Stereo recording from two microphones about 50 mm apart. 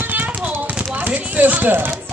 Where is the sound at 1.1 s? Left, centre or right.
Right.